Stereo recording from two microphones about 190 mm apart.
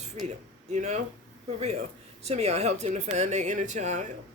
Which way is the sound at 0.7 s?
35° right (ahead or behind).